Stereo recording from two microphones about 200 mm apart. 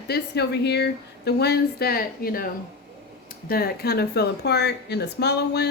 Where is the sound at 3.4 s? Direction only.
50° left (ahead or behind).